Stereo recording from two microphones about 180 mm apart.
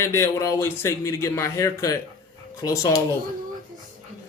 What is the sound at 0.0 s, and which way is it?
A man's voice, 15° left (ahead or behind).